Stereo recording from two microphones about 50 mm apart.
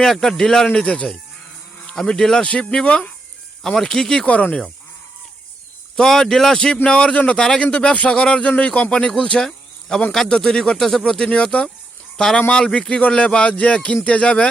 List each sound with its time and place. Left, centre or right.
0.0 s a man's voice: centre
2.8 s speech: left
3.8 s a man's voice: centre
6.0 s a man's voice: centre
7.6 s speech: left
9.4 s insect: centre
10.1 s a man's voice: centre